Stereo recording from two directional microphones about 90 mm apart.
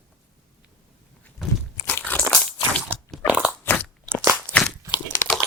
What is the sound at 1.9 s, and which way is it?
Crunch, 20° left (ahead or behind).